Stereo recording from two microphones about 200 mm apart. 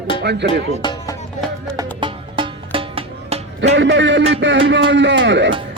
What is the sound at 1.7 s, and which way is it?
Music, 25° right (ahead or behind).